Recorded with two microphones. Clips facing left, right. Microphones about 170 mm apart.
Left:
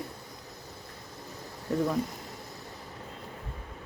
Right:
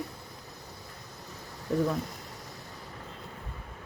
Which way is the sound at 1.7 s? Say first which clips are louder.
Right 1 dB; 5° left (ahead or behind).